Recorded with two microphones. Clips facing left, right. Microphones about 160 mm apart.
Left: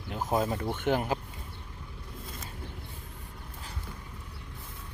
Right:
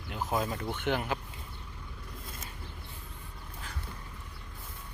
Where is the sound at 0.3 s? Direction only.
25° left (ahead or behind).